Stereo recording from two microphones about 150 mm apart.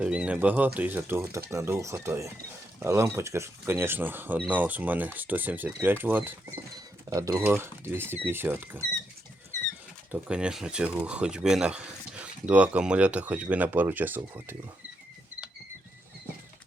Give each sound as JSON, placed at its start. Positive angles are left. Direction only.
{"t": 0.0, "sound": "speech", "side_deg": -5}
{"t": 7.1, "sound": "speech", "side_deg": -25}
{"t": 10.1, "sound": "speech", "side_deg": -5}